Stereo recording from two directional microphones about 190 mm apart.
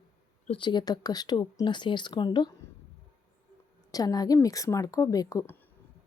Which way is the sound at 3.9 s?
20° left (ahead or behind).